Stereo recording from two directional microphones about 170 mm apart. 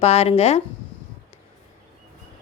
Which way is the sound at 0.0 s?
40° left (ahead or behind).